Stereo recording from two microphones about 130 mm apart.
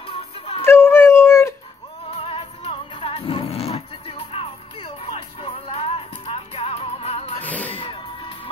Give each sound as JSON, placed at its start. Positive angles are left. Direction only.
{"t": 0.0, "sound": "music", "side_deg": 45}
{"t": 0.7, "sound": "dog", "side_deg": 20}
{"t": 2.0, "sound": "music", "side_deg": 45}
{"t": 7.4, "sound": "music", "side_deg": 10}
{"t": 7.8, "sound": "music", "side_deg": 40}